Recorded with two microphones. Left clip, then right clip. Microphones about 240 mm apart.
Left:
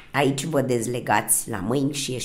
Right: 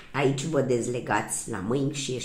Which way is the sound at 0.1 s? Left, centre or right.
Left.